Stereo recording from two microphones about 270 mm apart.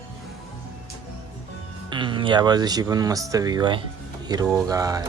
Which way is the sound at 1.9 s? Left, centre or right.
Centre.